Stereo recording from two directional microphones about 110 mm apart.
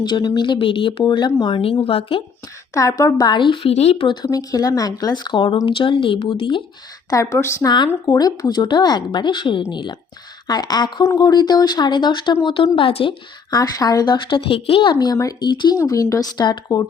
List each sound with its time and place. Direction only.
0.0 s speech: 45° left (ahead or behind); by 2.2 s 60° left (ahead or behind)
2.7 s speech: 30° left (ahead or behind); by 3.9 s 70° left (ahead or behind)
4.0 s a woman's voice: 40° left (ahead or behind)
7.1 s a woman's voice: 30° left (ahead or behind)
8.0 s a woman's voice: 35° left (ahead or behind); by 13.1 s 55° left (ahead or behind)
13.5 s speech: 35° left (ahead or behind); by 14.9 s 50° left (ahead or behind)
14.9 s a woman's voice: 35° left (ahead or behind)
15.8 s a woman's voice: 30° left (ahead or behind)